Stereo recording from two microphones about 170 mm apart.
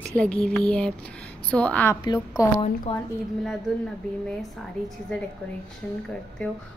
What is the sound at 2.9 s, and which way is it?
Speech, 35° left (ahead or behind).